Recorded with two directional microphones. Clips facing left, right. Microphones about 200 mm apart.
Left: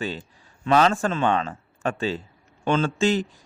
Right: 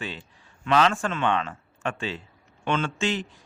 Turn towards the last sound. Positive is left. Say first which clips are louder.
# left 6 dB
turn(degrees=40)  # may be behind; listen again after turning